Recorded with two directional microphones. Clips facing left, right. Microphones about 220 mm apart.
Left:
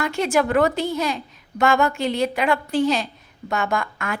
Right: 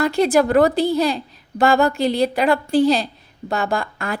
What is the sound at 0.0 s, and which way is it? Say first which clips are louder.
A woman's voice: right 5 dB; 35° right (ahead or behind).